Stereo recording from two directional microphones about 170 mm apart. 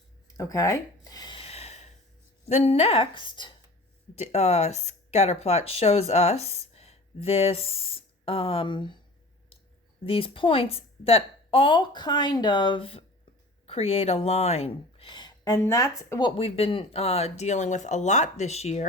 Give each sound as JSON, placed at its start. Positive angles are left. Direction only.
{"t": 0.3, "sound": "a sound", "side_deg": 20}
{"t": 2.5, "sound": "a woman's voice", "side_deg": 40}
{"t": 4.1, "sound": "speech", "side_deg": 40}
{"t": 10.0, "sound": "a woman's voice", "side_deg": 35}
{"t": 16.3, "sound": "a woman's voice", "side_deg": 35}